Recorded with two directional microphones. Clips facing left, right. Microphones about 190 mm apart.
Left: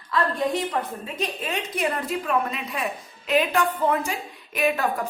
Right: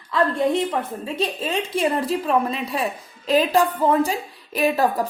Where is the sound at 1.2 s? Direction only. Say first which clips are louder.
Right 4 dB; 30° right (ahead or behind).